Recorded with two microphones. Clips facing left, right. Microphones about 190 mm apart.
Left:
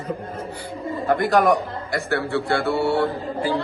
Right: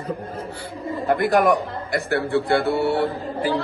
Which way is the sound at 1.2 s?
55° right (ahead or behind).